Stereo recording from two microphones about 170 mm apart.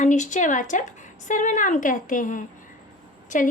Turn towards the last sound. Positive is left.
turn(degrees=50)  # may be behind; listen again after turning